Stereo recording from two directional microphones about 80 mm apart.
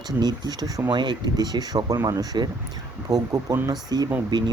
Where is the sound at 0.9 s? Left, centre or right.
Right.